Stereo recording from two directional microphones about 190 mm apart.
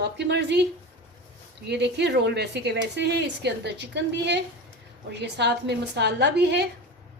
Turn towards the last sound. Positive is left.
turn(degrees=-65)  # may be behind; listen again after turning